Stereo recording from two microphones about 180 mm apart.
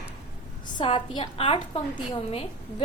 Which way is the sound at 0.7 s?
25° left (ahead or behind).